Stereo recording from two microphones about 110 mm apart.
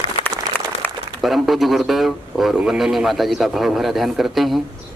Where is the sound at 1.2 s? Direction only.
Centre (ahead or behind).